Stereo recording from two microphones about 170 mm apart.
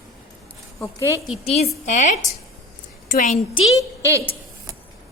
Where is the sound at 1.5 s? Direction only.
40° left (ahead or behind).